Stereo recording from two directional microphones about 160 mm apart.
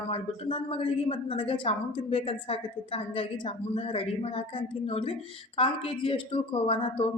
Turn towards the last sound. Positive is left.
turn(degrees=35)  # may be behind; listen again after turning